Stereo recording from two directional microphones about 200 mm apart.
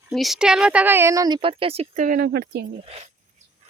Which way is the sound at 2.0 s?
45° right (ahead or behind).